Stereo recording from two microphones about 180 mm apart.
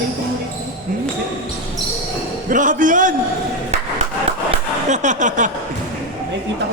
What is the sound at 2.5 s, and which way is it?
Speech, 45° right (ahead or behind).